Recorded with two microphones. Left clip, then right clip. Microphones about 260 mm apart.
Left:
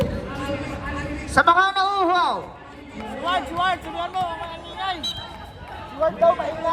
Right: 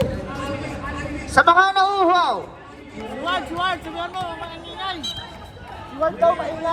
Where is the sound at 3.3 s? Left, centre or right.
Left.